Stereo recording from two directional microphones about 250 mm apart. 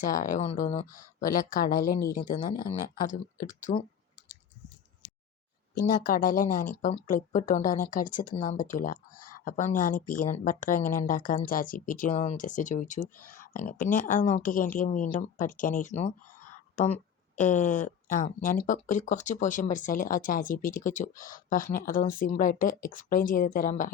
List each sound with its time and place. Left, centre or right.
0.0 s speech: left
5.7 s speech: left